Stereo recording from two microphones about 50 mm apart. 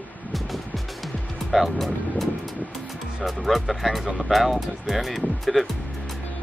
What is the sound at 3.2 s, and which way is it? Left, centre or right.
Speech, centre.